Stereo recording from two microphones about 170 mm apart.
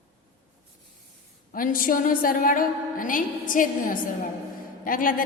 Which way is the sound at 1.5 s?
55° left (ahead or behind).